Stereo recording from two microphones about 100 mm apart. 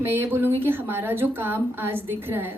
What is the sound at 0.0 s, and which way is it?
A woman's voice, 20° right (ahead or behind).